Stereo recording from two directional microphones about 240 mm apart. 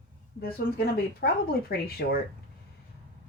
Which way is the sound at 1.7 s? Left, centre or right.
Left.